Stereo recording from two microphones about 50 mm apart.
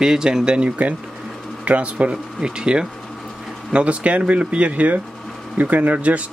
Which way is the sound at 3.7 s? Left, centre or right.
Right.